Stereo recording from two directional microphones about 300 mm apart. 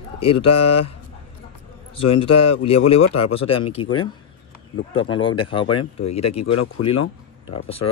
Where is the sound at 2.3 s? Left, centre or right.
Left.